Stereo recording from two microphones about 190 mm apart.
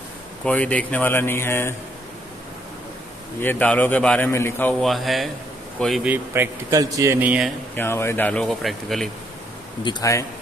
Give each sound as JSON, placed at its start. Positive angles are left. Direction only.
{"t": 0.5, "sound": "a man's voice", "side_deg": 5}
{"t": 3.3, "sound": "a man's voice", "side_deg": 10}
{"t": 7.7, "sound": "a man's voice", "side_deg": 10}
{"t": 9.8, "sound": "speech", "side_deg": 20}